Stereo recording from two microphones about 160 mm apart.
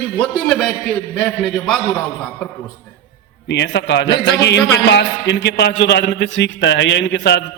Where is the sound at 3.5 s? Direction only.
90° left.